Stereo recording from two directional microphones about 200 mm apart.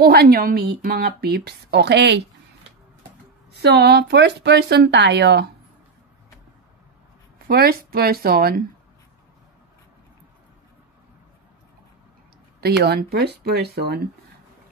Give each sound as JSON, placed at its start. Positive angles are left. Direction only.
{"t": 0.0, "sound": "speech", "side_deg": -50}
{"t": 3.5, "sound": "speech", "side_deg": -55}
{"t": 7.4, "sound": "speech", "side_deg": -50}
{"t": 12.5, "sound": "speech", "side_deg": -55}